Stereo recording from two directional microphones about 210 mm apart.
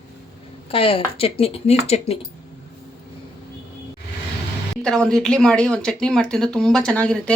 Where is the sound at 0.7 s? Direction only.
25° left (ahead or behind).